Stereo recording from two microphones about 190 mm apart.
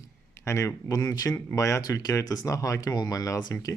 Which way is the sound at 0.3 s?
15° left (ahead or behind).